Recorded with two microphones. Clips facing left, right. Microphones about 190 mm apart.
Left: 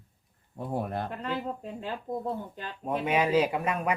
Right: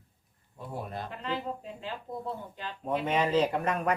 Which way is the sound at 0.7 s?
55° left (ahead or behind).